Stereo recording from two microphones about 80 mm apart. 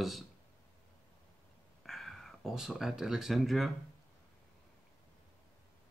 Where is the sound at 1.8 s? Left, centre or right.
Centre.